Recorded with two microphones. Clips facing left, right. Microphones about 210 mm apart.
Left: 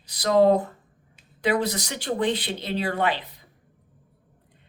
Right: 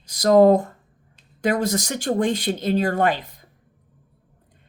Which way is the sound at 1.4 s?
45° right (ahead or behind).